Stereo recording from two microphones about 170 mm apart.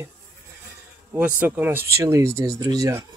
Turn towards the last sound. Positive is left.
turn(degrees=-20)  # may be behind; listen again after turning